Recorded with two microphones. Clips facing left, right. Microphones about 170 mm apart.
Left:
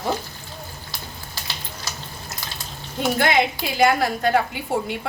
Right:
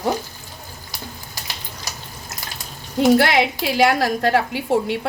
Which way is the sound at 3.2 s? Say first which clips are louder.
Right 2 dB; 75° right (ahead or behind).